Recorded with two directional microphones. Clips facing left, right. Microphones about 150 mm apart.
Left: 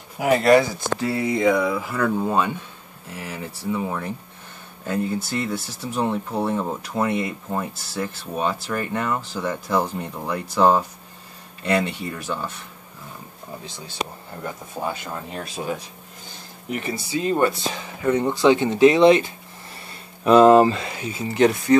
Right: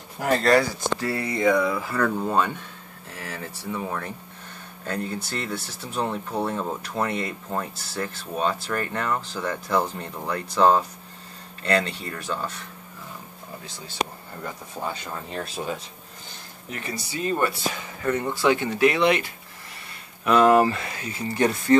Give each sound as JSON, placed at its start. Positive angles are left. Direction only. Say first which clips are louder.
{"t": 0.2, "sound": "speech", "louder": "left 4 dB", "side_deg": 10}
{"t": 14.8, "sound": "speech", "louder": "left 3 dB", "side_deg": 20}
{"t": 15.3, "sound": "speech", "louder": "right 1 dB", "side_deg": 10}
{"t": 16.9, "sound": "speech", "louder": "left 3 dB", "side_deg": 20}